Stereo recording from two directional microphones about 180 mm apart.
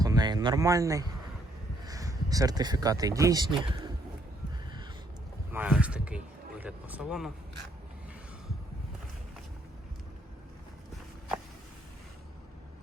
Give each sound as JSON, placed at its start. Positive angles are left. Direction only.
{"t": 0.0, "sound": "a sound", "side_deg": -20}
{"t": 1.8, "sound": "speech", "side_deg": -20}
{"t": 5.5, "sound": "speech", "side_deg": -10}